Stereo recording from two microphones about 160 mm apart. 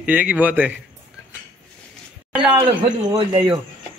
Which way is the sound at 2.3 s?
5° right (ahead or behind).